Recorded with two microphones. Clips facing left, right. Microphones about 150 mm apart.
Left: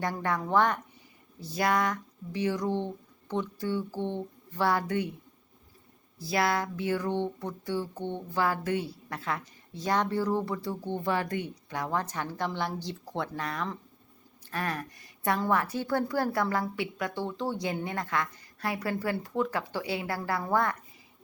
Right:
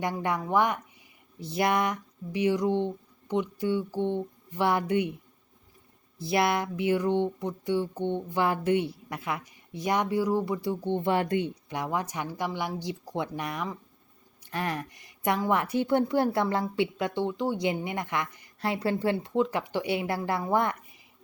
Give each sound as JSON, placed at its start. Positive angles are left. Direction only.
{"t": 0.0, "sound": "speech", "side_deg": -15}
{"t": 6.1, "sound": "a woman's voice", "side_deg": -20}